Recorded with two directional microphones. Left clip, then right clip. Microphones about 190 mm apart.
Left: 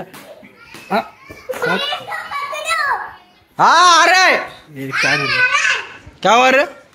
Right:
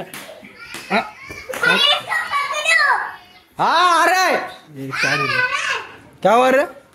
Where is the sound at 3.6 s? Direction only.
10° left (ahead or behind).